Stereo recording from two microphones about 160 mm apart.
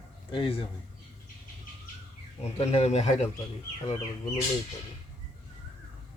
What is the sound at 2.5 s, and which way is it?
Speech, 40° left (ahead or behind).